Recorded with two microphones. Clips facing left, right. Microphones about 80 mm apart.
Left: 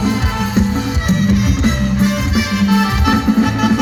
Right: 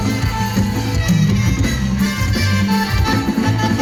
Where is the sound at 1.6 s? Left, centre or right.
Left.